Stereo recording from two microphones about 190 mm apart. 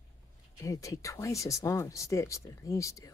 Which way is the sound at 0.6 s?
15° left (ahead or behind).